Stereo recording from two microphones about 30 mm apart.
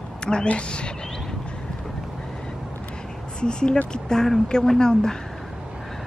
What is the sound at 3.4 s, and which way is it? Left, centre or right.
A woman's voice, left.